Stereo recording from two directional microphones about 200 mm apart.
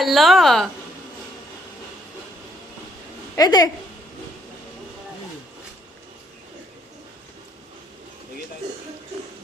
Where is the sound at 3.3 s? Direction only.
20° left (ahead or behind).